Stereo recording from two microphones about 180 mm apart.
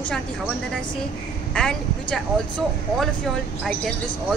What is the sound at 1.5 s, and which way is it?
Speech, 5° left (ahead or behind).